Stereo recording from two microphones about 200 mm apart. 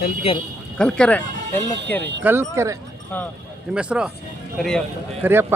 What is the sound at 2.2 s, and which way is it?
A man's voice, 10° right (ahead or behind).